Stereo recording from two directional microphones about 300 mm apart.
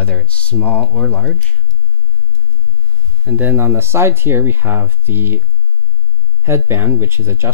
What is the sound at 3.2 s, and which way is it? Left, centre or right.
Speech, centre.